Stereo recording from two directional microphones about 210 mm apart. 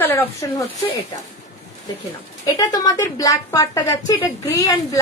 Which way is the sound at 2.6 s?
15° left (ahead or behind).